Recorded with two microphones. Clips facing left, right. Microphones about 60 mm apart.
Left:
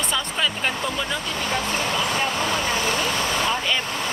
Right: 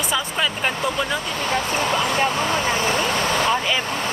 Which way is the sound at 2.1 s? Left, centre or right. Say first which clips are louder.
Right 3 dB; right.